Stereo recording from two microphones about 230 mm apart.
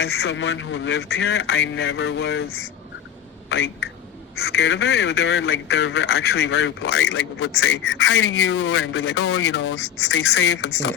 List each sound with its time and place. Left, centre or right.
0.0 s a man's voice: left
3.5 s a man's voice: left